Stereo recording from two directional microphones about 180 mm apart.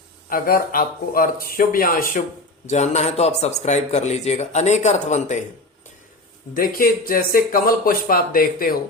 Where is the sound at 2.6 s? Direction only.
40° left (ahead or behind).